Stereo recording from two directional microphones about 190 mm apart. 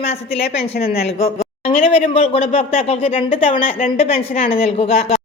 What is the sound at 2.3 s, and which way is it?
A woman's voice, 30° left (ahead or behind).